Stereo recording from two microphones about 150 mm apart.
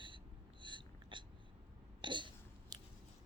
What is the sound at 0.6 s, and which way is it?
Hiccup, 30° right (ahead or behind).